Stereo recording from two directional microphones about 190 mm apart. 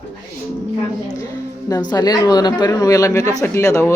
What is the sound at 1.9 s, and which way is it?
Speech, 20° left (ahead or behind).